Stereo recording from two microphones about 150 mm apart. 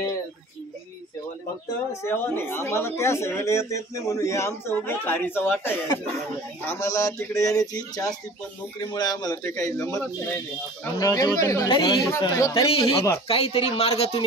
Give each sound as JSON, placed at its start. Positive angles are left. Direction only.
{"t": 2.0, "sound": "a man's voice", "side_deg": 15}
{"t": 13.3, "sound": "speech", "side_deg": 40}